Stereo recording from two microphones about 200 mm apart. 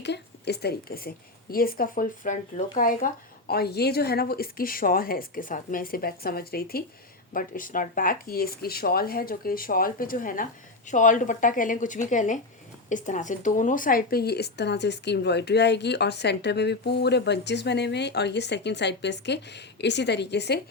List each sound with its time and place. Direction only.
0.0 s speech: 60° left (ahead or behind)